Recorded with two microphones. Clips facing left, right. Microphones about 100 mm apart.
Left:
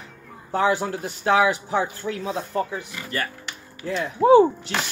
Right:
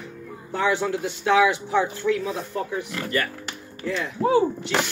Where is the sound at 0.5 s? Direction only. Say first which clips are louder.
Left 1 dB; 35° left (ahead or behind).